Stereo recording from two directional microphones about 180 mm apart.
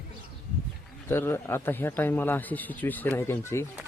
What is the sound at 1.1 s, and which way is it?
Speech, 15° left (ahead or behind).